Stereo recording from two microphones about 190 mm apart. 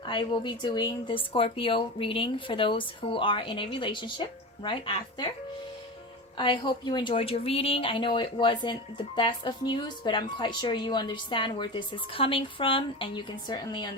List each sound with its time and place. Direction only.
0.0 s a woman's voice: 25° left (ahead or behind)
6.3 s a woman's voice: 25° left (ahead or behind)